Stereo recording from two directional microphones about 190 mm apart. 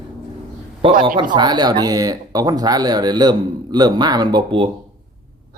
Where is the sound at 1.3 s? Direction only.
20° right (ahead or behind).